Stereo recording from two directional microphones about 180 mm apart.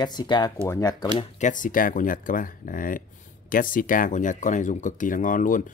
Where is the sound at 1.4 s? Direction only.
45° left (ahead or behind).